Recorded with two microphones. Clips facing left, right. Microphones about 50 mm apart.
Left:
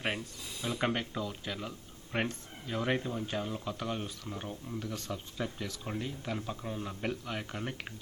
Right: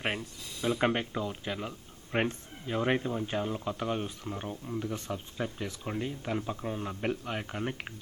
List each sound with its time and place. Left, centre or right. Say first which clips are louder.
0.7 s speech: right 4 dB; centre